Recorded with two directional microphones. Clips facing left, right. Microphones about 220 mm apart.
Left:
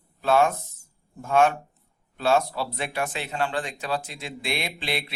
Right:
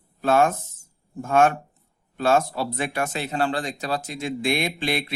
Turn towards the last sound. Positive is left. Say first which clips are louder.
# right 5 dB
turn(degrees=-45)  # may be behind; listen again after turning